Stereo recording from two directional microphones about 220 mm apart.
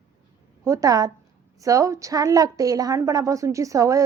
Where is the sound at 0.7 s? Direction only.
15° right (ahead or behind).